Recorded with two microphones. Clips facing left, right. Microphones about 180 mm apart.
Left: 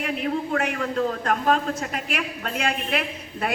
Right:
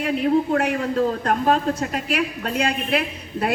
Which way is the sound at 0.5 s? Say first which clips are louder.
Right 4 dB; 35° right (ahead or behind).